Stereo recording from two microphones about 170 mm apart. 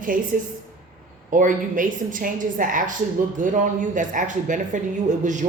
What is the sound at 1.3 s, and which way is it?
Speech, 50° right (ahead or behind).